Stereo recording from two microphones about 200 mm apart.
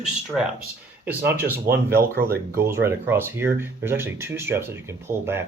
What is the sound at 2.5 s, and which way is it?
Speech, 10° right (ahead or behind).